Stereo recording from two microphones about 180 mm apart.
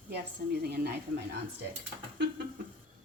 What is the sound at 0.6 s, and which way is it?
Speech, 60° right (ahead or behind).